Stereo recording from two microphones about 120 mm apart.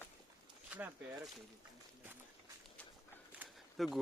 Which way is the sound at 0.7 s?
10° right (ahead or behind).